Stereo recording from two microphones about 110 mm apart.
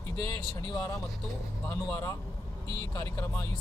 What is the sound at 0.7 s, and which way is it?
Speech, 25° left (ahead or behind).